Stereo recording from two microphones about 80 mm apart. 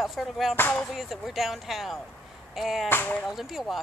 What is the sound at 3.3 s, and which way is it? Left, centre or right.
Speech, centre.